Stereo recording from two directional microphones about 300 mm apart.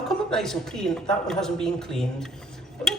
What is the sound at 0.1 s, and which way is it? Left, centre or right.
Speech, centre.